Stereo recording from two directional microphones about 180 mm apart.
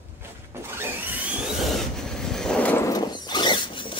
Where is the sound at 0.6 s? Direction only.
10° right (ahead or behind).